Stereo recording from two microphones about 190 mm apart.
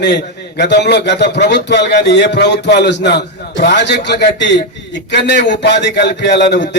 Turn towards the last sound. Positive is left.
turn(degrees=65)  # may be behind; listen again after turning